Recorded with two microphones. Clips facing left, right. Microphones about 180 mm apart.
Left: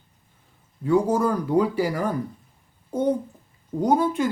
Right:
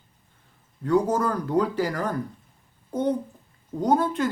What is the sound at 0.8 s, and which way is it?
Speech, 10° left (ahead or behind).